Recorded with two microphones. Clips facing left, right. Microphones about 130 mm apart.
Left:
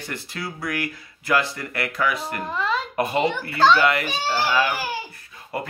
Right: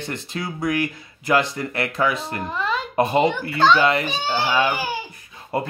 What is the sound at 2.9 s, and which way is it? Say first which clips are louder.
A child's voice: right 6 dB; 25° right (ahead or behind).